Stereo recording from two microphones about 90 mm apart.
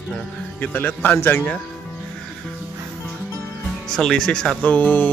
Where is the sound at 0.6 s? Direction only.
15° left (ahead or behind).